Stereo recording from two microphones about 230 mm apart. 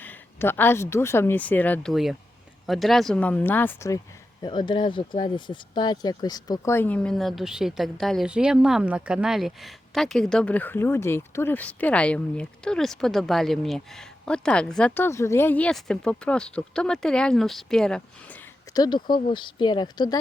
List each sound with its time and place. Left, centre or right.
0.0 s speech: centre